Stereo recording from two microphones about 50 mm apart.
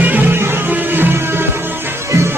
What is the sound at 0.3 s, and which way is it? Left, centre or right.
Music, right.